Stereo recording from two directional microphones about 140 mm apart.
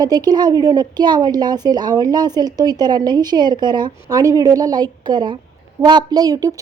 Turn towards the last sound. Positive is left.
turn(degrees=-25)  # may be behind; listen again after turning